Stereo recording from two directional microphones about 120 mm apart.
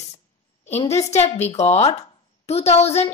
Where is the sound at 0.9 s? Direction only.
65° left (ahead or behind).